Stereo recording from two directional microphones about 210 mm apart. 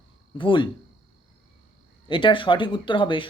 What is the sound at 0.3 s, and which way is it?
Speech, 25° left (ahead or behind).